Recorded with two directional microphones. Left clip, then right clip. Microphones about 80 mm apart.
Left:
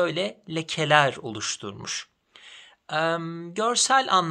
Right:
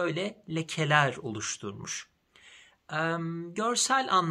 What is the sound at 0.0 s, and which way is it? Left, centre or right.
Speech, left.